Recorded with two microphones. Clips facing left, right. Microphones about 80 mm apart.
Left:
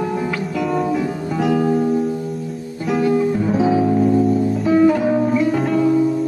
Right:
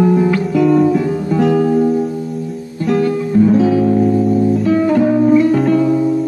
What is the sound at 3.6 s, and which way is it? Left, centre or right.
Music, centre.